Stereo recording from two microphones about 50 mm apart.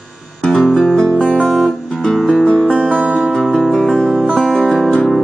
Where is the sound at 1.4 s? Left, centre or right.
Centre.